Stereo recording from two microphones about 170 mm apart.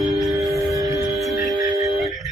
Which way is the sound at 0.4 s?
20° right (ahead or behind).